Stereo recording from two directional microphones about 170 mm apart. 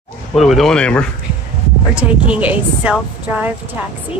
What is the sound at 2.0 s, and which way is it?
A woman's voice, 10° right (ahead or behind).